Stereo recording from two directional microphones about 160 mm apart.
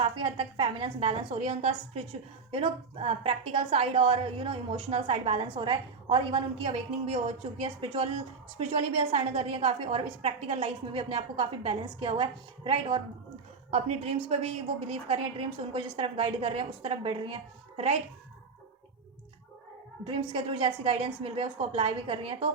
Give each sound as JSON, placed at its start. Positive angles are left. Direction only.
{"t": 0.0, "sound": "a woman's voice", "side_deg": -35}
{"t": 20.1, "sound": "a woman's voice", "side_deg": -35}